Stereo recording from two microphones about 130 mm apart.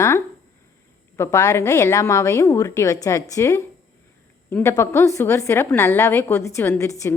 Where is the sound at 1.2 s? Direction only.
25° left (ahead or behind).